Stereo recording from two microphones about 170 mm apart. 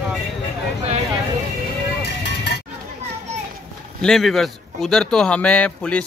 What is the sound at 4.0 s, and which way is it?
Speech, centre (ahead or behind).